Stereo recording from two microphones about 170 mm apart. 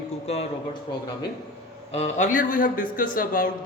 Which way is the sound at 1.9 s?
45° left (ahead or behind).